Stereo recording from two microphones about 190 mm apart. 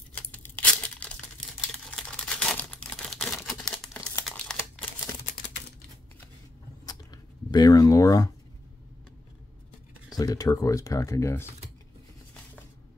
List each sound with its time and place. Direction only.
0.1 s tearing: 10° left (ahead or behind)
1.7 s a sound: 5° left (ahead or behind)
4.0 s crumpling: 15° left (ahead or behind)
4.3 s crumpling: 5° left (ahead or behind)
6.9 s a sound: 20° left (ahead or behind)
10.1 s speech: 20° left (ahead or behind)